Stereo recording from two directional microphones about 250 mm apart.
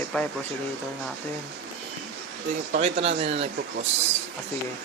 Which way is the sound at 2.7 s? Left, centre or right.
Right.